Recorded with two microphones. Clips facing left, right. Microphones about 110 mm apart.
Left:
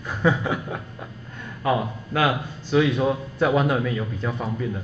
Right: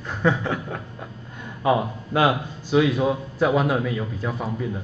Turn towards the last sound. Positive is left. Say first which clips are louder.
# even
turn(degrees=-5)  # may be behind; listen again after turning